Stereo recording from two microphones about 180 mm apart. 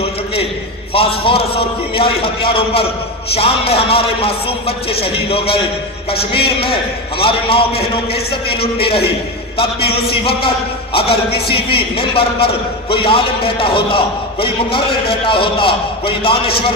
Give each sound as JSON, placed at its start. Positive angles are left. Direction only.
{"t": 0.9, "sound": "a man's voice", "side_deg": 30}